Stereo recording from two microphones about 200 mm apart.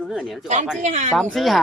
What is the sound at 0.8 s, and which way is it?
Speech, 35° right (ahead or behind).